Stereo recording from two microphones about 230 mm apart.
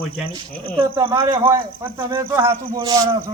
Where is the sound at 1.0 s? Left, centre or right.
Centre.